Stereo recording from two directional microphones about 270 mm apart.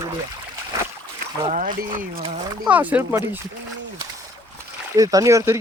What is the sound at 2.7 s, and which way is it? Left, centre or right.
Speech, centre.